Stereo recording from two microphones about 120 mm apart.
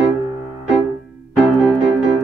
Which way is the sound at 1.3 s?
Centre (ahead or behind).